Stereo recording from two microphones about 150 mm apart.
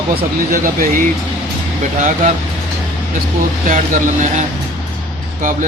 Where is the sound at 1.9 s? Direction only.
50° right (ahead or behind).